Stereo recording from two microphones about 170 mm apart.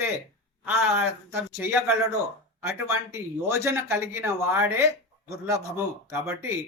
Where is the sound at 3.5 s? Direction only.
15° right (ahead or behind).